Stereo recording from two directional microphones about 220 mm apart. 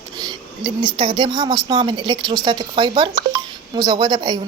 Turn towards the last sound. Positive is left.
turn(degrees=-20)  # may be behind; listen again after turning